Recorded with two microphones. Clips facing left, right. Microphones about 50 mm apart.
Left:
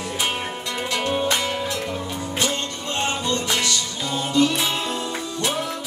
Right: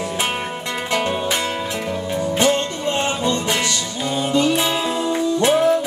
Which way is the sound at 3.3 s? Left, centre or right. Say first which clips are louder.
Right 3 dB; centre.